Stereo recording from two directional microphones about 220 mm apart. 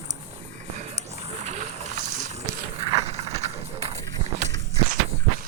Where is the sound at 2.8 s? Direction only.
15° right (ahead or behind).